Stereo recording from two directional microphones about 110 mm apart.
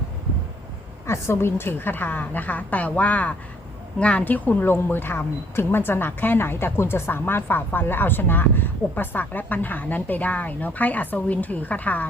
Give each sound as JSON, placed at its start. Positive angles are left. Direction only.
{"t": 1.0, "sound": "speech", "side_deg": 25}